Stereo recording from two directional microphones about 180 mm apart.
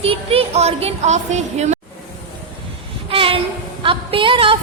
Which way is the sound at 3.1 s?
30° right (ahead or behind).